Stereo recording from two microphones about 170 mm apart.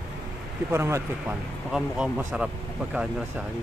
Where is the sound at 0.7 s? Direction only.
15° right (ahead or behind).